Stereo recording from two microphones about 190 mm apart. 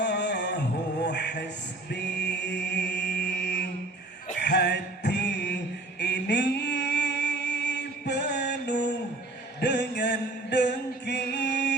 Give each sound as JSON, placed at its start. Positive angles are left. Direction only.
{"t": 0.0, "sound": "music", "side_deg": 65}
{"t": 1.9, "sound": "chant", "side_deg": 65}
{"t": 4.4, "sound": "music", "side_deg": 60}
{"t": 6.0, "sound": "mantra", "side_deg": 65}
{"t": 9.6, "sound": "a sound", "side_deg": 65}